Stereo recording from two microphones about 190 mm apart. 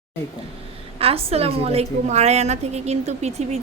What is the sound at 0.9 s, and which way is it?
A woman's voice, 30° right (ahead or behind).